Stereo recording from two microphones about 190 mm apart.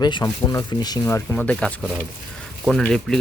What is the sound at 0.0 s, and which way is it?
Speech, 20° left (ahead or behind).